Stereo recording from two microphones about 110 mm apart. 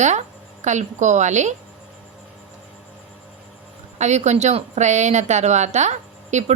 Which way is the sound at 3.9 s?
90° right.